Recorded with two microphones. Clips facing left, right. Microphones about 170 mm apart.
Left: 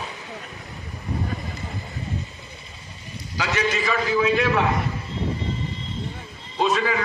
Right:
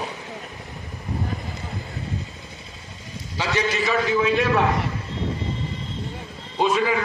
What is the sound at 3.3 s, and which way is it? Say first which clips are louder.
Speech: even; 30° right (ahead or behind).